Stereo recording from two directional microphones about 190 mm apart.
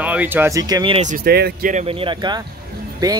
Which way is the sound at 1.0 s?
50° right (ahead or behind).